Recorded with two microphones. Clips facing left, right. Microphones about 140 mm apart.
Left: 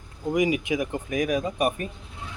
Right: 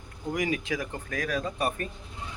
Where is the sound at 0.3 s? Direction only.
15° left (ahead or behind).